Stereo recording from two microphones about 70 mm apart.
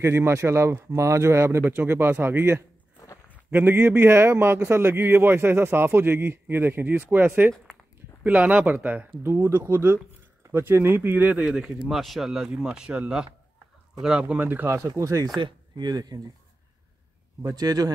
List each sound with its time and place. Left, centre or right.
0.0 s a man's voice: right
9.2 s a man's voice: right
10.5 s speech: right
11.4 s speech: centre; by 14.7 s right
14.7 s speech: right
17.4 s a man's voice: right